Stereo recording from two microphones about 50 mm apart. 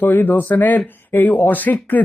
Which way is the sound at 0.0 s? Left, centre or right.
Left.